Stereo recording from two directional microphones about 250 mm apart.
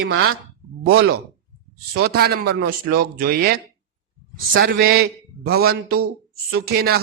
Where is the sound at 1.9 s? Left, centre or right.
Right.